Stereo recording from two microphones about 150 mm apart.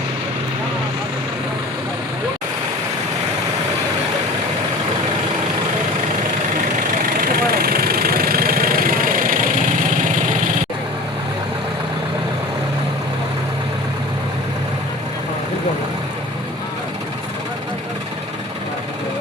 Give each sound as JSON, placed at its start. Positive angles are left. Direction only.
{"t": 7.2, "sound": "vehicle", "side_deg": -80}